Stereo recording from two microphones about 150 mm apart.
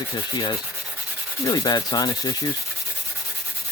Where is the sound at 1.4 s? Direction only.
25° left (ahead or behind).